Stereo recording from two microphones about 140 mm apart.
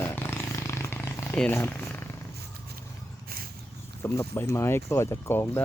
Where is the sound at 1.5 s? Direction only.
15° left (ahead or behind).